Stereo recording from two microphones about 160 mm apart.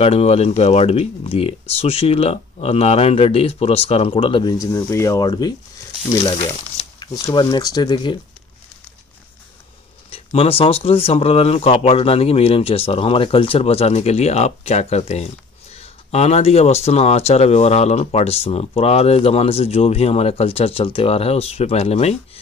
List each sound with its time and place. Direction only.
0.0 s speech: 40° left (ahead or behind); by 5.5 s 25° left (ahead or behind)
6.3 s crumpling: 35° left (ahead or behind)
7.2 s speech: 25° left (ahead or behind)
10.1 s speech: 35° left (ahead or behind)